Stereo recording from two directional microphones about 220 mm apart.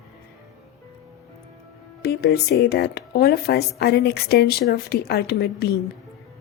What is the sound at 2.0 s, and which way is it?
Speech, 45° left (ahead or behind).